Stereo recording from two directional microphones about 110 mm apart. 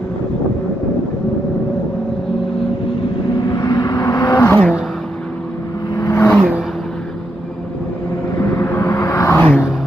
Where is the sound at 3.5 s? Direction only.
40° left (ahead or behind).